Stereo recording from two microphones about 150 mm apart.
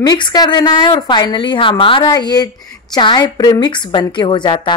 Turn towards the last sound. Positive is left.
turn(degrees=30)  # may be behind; listen again after turning